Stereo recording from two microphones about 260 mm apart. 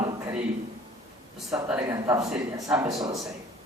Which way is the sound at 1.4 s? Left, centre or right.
Centre.